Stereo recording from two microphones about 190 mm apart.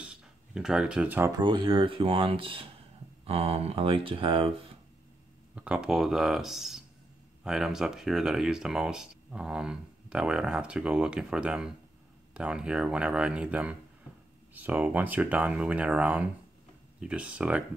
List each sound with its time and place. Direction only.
0.0 s a sound: 5° right (ahead or behind)
1.3 s speech: 25° right (ahead or behind)
5.6 s speech: 5° right (ahead or behind)